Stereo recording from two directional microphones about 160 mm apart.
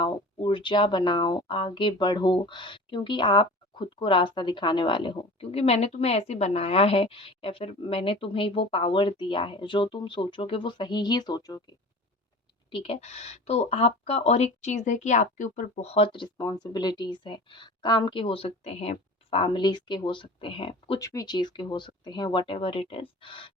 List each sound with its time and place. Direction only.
0.0 s speech: 30° left (ahead or behind)
12.7 s speech: 40° left (ahead or behind)
21.0 s speech: 20° left (ahead or behind)